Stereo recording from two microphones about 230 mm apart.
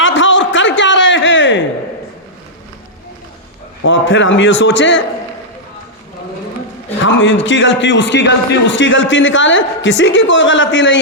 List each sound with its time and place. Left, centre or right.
0.0 s a sound: left
3.8 s a man's voice: left
7.0 s a man's voice: left